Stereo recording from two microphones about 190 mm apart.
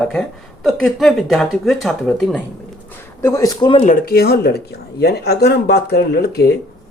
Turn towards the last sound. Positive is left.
turn(degrees=55)  # may be behind; listen again after turning